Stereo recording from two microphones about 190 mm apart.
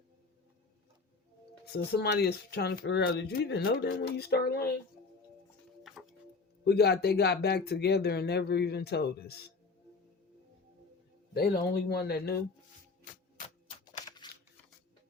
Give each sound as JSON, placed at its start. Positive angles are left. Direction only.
{"t": 1.6, "sound": "speech", "side_deg": 55}
{"t": 6.7, "sound": "speech", "side_deg": 60}
{"t": 11.3, "sound": "speech", "side_deg": 55}